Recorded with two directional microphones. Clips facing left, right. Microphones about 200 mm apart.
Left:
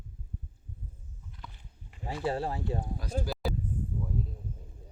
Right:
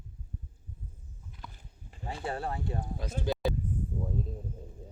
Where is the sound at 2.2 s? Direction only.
25° left (ahead or behind).